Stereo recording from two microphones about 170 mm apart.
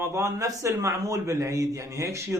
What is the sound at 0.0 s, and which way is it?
A man's voice, 15° right (ahead or behind).